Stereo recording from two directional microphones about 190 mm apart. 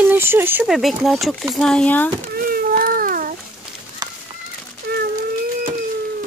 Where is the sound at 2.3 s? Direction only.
50° right (ahead or behind).